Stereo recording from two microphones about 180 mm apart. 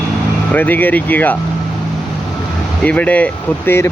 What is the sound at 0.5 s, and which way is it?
Speech, 10° left (ahead or behind).